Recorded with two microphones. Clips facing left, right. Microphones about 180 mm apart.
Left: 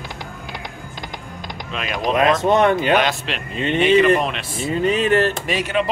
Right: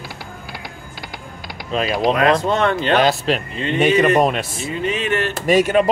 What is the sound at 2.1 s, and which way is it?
Speech, 20° left (ahead or behind).